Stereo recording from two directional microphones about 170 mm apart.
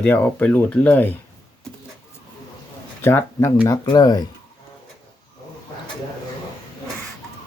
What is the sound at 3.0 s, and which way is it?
Speech, 15° left (ahead or behind).